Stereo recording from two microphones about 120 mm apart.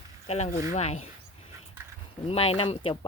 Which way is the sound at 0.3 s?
65° left (ahead or behind).